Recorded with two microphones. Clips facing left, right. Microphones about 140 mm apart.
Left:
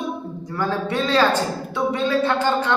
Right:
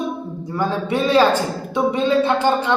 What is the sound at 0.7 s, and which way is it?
Speech, 15° right (ahead or behind).